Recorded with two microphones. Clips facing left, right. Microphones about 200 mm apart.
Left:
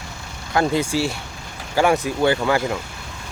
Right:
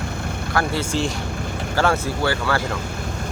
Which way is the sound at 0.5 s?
15° left (ahead or behind).